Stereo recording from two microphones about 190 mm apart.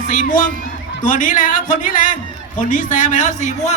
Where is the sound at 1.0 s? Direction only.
45° left (ahead or behind).